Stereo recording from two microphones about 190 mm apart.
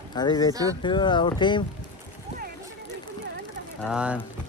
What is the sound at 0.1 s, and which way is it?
Speech, 20° left (ahead or behind).